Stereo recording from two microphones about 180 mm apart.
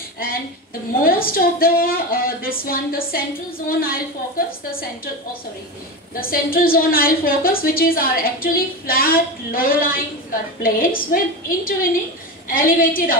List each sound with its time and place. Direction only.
1.0 s a woman's voice: 55° left (ahead or behind)
6.1 s a woman's voice: 55° left (ahead or behind)